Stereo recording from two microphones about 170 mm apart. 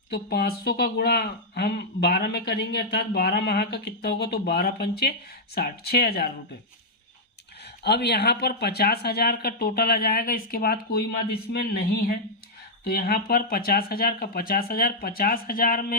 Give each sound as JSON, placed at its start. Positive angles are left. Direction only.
{"t": 0.1, "sound": "speech", "side_deg": 70}
{"t": 7.9, "sound": "speech", "side_deg": 75}